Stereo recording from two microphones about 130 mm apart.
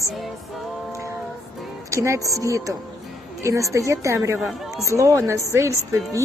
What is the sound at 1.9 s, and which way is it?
Speech, 20° right (ahead or behind).